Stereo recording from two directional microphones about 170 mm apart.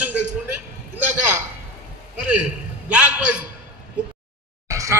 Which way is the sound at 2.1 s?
5° right (ahead or behind).